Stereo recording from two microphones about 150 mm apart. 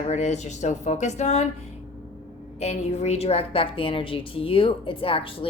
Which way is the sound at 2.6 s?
45° left (ahead or behind).